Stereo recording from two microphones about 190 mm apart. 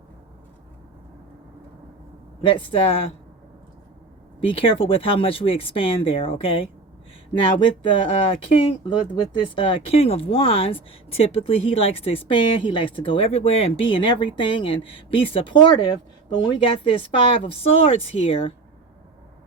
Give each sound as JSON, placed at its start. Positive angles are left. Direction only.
{"t": 2.4, "sound": "speech", "side_deg": 30}
{"t": 4.4, "sound": "speech", "side_deg": 30}
{"t": 7.9, "sound": "speech", "side_deg": 30}